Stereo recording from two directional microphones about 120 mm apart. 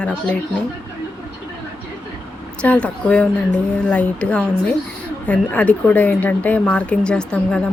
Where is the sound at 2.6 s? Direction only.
10° left (ahead or behind).